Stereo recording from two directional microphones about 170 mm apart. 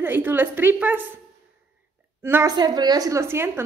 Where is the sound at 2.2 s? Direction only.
15° right (ahead or behind).